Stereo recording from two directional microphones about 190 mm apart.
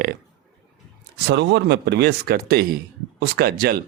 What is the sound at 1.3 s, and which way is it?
Speech, 65° right (ahead or behind).